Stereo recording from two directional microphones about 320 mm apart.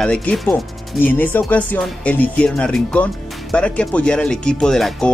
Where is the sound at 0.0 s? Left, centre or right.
Centre.